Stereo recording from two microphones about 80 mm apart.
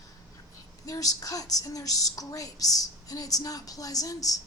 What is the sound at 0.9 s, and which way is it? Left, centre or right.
A woman's voice, left.